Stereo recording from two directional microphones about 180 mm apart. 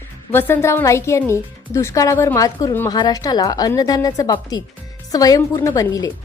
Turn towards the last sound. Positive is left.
turn(degrees=20)  # may be behind; listen again after turning